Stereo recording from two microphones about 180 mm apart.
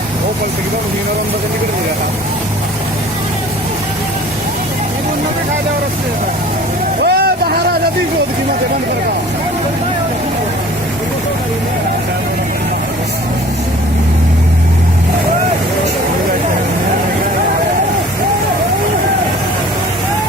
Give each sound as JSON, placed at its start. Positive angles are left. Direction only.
{"t": 7.0, "sound": "vehicle", "side_deg": -60}